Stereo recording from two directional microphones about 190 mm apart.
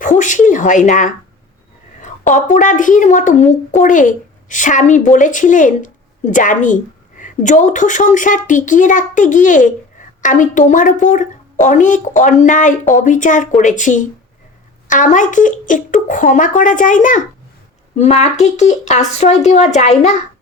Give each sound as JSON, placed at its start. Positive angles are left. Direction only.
{"t": 0.0, "sound": "a woman's voice", "side_deg": 40}